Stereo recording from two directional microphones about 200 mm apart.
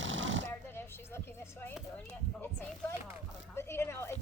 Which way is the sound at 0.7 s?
10° left (ahead or behind).